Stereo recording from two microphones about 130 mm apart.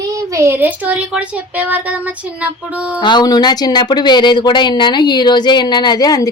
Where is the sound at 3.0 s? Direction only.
35° left (ahead or behind).